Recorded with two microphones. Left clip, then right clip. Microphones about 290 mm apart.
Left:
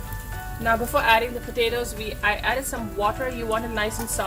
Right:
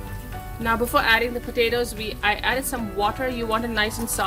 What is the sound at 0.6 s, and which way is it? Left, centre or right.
A woman's voice, right.